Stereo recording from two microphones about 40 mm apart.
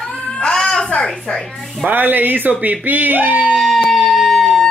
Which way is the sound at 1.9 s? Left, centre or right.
Right.